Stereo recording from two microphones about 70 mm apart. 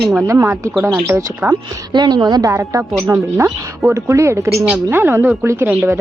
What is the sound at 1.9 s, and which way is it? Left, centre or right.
Speech, right.